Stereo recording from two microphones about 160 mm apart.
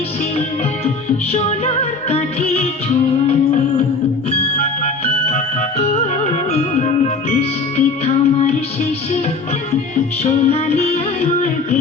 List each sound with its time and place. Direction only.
1.3 s music: 40° left (ahead or behind)
5.3 s music: 40° left (ahead or behind)
10.2 s music: 40° left (ahead or behind)